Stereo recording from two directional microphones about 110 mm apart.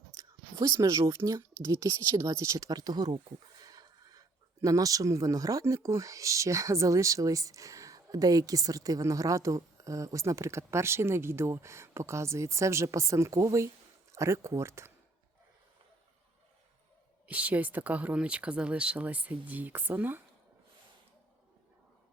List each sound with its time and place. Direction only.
0.2 s speech: 25° right (ahead or behind)
3.6 s a sound: 35° right (ahead or behind)
4.6 s speech: 30° right (ahead or behind)
17.2 s speech: 15° right (ahead or behind)